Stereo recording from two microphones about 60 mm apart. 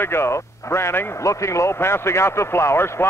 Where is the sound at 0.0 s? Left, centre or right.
Left.